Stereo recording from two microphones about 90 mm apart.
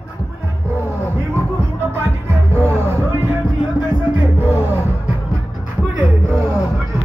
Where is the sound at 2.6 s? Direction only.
30° right (ahead or behind).